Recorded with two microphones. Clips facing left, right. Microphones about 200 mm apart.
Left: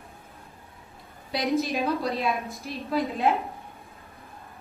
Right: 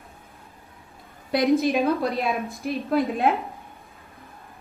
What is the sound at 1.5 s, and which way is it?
Speech, 50° right (ahead or behind).